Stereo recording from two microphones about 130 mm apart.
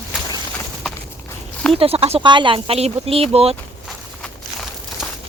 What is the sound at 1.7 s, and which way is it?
Speech, 50° right (ahead or behind).